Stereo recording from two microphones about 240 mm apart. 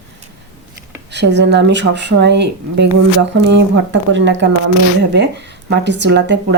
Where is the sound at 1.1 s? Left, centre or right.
Right.